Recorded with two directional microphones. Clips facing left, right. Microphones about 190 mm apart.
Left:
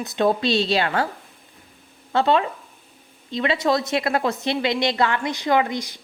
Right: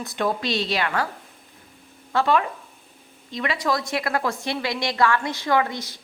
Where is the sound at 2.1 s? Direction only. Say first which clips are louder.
Left 2 dB; 25° left (ahead or behind).